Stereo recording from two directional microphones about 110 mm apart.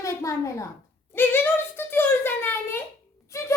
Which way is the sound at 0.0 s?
30° left (ahead or behind).